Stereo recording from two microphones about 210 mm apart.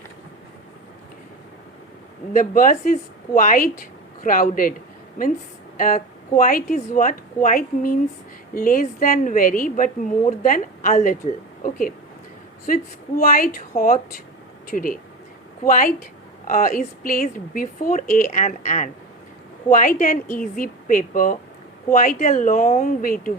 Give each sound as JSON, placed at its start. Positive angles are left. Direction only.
{"t": 2.3, "sound": "a woman's voice", "side_deg": 40}
{"t": 5.7, "sound": "a woman's voice", "side_deg": 40}